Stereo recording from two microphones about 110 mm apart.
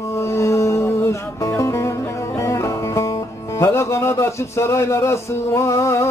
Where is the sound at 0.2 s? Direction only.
25° left (ahead or behind).